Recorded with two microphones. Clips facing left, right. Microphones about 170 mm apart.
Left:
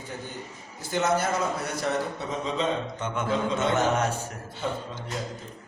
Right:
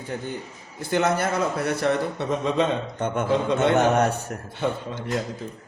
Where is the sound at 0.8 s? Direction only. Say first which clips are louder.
Right 3 dB; 60° right (ahead or behind).